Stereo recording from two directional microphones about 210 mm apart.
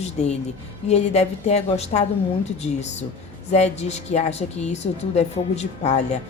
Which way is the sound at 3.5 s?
30° left (ahead or behind).